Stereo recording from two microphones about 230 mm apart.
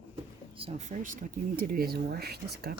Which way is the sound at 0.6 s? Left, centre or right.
Right.